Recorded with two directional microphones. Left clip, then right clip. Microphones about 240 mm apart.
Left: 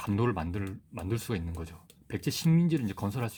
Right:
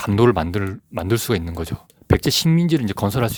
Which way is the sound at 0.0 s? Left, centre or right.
Right.